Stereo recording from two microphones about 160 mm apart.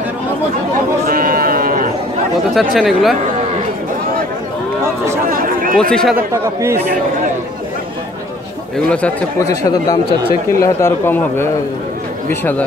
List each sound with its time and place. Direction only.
1.0 s sheep: 65° right (ahead or behind)
2.5 s speech: centre (ahead or behind)
5.3 s a sound: 60° right (ahead or behind)
5.8 s speech: 5° left (ahead or behind)
6.1 s a man's voice: 15° right (ahead or behind)
8.8 s a man's voice: 10° left (ahead or behind)
9.4 s a man's voice: 20° left (ahead or behind)